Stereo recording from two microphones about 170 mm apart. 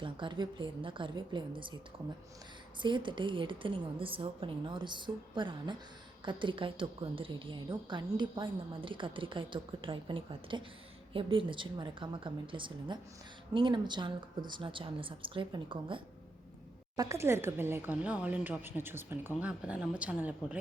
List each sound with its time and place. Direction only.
0.0 s a woman's voice: 30° right (ahead or behind)
2.8 s a woman's voice: 30° right (ahead or behind)
17.0 s speech: 15° right (ahead or behind)